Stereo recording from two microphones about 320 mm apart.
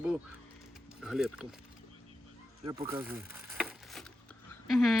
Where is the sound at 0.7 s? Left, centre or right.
Centre.